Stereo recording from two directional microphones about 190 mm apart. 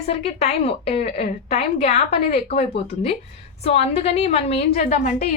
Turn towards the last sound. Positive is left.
turn(degrees=40)  # may be behind; listen again after turning